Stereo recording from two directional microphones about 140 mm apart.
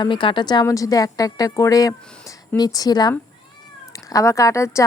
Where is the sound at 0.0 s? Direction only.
35° left (ahead or behind).